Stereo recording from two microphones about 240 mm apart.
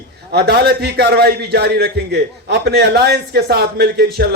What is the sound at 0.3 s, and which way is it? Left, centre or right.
A man's voice, right.